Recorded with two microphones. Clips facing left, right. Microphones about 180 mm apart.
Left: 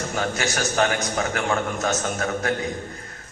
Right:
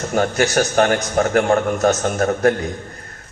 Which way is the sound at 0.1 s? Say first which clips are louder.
Right 11 dB; 50° right (ahead or behind).